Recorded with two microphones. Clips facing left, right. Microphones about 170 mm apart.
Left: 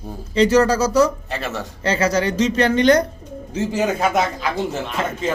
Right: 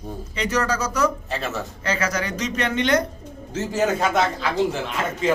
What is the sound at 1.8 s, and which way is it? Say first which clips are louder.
A woman's voice: left 7 dB; 30° left (ahead or behind).